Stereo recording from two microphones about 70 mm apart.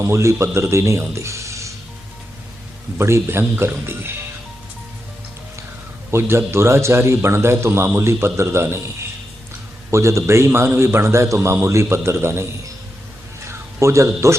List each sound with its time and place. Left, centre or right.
0.0 s speech: right
3.0 s a man's voice: right
6.1 s a man's voice: right
9.9 s a man's voice: right
13.5 s speech: right